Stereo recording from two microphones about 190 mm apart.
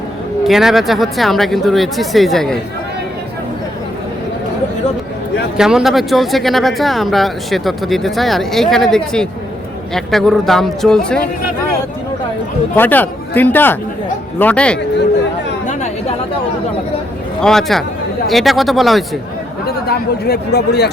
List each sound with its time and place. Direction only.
0.4 s speech: centre (ahead or behind)
5.5 s speech: 5° right (ahead or behind)
12.7 s speech: 10° left (ahead or behind)
17.4 s speech: centre (ahead or behind)
19.6 s speech: 55° left (ahead or behind)